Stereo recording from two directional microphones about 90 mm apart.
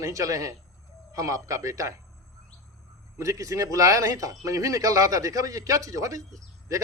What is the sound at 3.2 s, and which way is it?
Speech, 35° right (ahead or behind).